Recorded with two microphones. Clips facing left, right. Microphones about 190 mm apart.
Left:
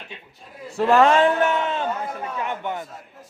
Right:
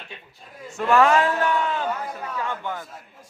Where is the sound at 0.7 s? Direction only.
35° left (ahead or behind).